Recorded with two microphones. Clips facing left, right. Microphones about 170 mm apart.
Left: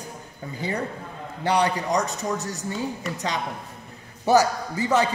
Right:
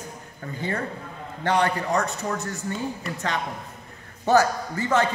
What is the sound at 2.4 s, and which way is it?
Speech, 40° left (ahead or behind).